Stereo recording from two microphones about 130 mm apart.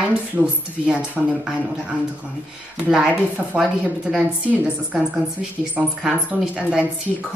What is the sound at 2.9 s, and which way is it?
A woman's voice, 10° right (ahead or behind).